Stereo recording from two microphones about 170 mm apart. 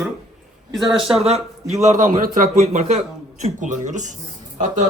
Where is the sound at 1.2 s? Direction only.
40° right (ahead or behind).